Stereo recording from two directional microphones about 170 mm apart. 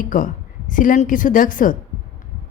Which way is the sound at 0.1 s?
50° left (ahead or behind).